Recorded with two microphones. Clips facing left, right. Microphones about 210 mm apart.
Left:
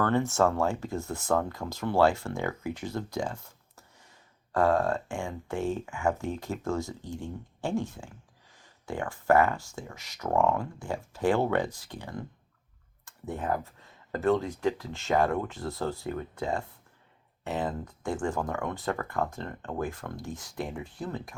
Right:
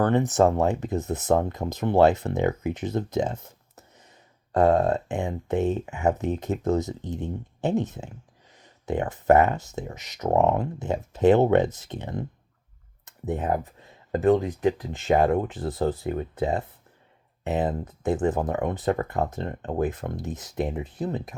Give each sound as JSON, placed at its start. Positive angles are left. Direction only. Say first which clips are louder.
{"t": 0.0, "sound": "speech", "louder": "right 5 dB", "side_deg": -20}